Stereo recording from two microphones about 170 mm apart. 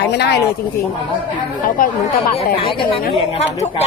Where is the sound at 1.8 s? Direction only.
55° left (ahead or behind).